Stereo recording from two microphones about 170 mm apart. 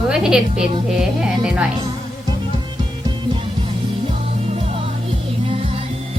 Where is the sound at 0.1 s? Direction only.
5° right (ahead or behind).